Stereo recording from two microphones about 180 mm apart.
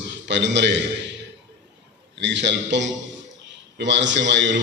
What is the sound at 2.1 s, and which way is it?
A man's voice, 80° right.